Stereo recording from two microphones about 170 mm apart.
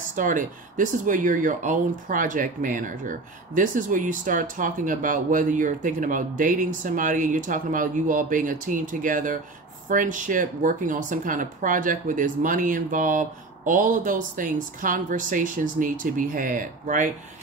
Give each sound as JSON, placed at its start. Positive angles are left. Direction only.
{"t": 0.0, "sound": "speech", "side_deg": -50}